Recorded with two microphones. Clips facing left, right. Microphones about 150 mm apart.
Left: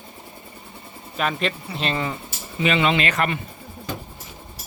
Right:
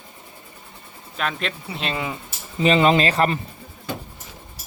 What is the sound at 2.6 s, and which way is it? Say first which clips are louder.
Speech: right 4 dB; 35° right (ahead or behind).